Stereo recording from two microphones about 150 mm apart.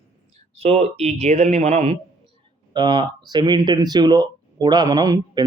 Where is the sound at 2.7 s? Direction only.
30° right (ahead or behind).